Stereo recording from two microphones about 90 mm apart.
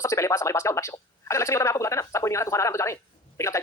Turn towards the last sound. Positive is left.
turn(degrees=35)  # may be behind; listen again after turning